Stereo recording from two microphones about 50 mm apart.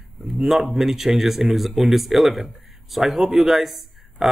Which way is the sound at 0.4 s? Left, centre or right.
Centre.